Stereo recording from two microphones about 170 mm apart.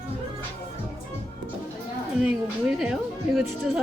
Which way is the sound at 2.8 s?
Centre (ahead or behind).